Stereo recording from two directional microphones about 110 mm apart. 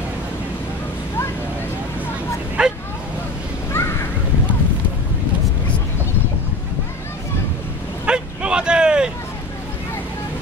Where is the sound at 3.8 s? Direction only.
20° left (ahead or behind).